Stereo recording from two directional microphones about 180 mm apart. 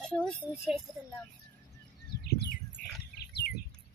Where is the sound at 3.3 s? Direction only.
65° left (ahead or behind).